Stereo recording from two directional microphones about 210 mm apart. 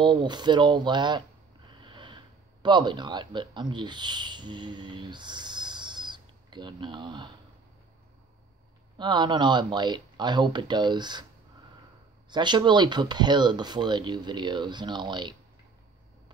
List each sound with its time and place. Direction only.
0.0 s speech: 20° right (ahead or behind)
1.8 s snort: 20° right (ahead or behind)
2.6 s speech: 20° right (ahead or behind)
8.9 s speech: 20° right (ahead or behind)
12.3 s speech: 20° right (ahead or behind)